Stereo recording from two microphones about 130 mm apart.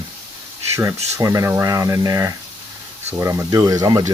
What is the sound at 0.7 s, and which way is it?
Speech, 20° right (ahead or behind).